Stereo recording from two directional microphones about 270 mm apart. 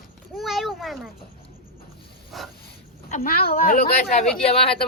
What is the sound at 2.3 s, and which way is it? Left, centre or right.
Speech, centre.